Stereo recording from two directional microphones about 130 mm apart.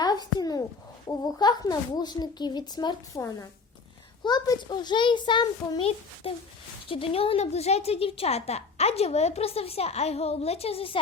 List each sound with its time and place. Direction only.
0.0 s a sound: 35° left (ahead or behind)
1.0 s a child's voice: 30° left (ahead or behind)
6.3 s a woman's voice: 45° left (ahead or behind)